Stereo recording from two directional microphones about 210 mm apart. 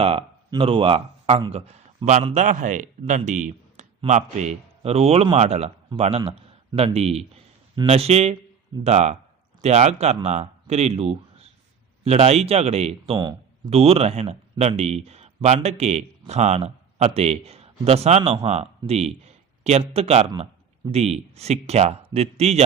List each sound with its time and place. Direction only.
0.0 s speech: 25° right (ahead or behind)